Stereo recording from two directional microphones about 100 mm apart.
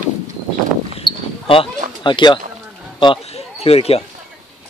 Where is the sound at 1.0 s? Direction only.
55° left (ahead or behind).